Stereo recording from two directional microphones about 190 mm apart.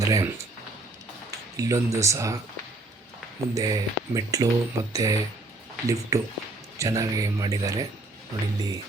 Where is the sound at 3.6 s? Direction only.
20° right (ahead or behind).